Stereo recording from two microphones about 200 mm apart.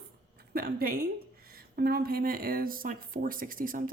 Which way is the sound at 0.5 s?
50° right (ahead or behind).